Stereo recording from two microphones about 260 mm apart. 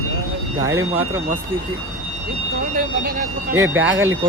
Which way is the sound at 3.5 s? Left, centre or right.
Right.